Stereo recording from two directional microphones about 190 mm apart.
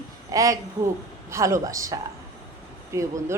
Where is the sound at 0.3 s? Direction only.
20° right (ahead or behind).